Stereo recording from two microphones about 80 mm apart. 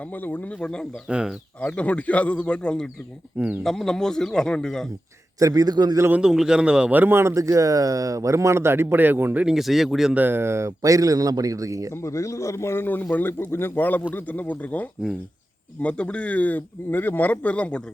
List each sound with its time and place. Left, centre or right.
0.2 s a man's voice: left
0.6 s speech: centre
1.0 s speech: centre
1.6 s speech: centre
3.3 s speech: right
3.6 s speech: centre
5.4 s speech: right
6.1 s speech: centre
6.9 s speech: right
9.5 s speech: centre
10.2 s speech: right
12.0 s a man's voice: left; by 17.8 s centre